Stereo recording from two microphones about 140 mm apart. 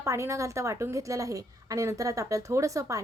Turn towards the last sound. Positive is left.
turn(degrees=-25)  # may be behind; listen again after turning